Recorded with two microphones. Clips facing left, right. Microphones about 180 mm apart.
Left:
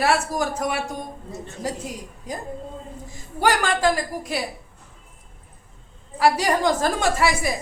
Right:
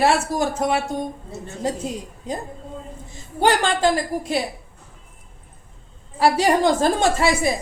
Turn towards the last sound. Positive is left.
turn(degrees=-25)  # may be behind; listen again after turning